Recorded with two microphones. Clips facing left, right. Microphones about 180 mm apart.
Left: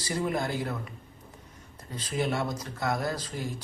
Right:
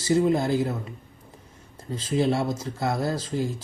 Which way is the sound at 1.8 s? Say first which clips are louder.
Right 6 dB; 25° right (ahead or behind).